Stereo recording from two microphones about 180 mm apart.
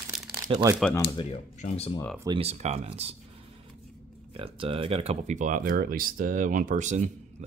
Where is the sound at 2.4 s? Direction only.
35° right (ahead or behind).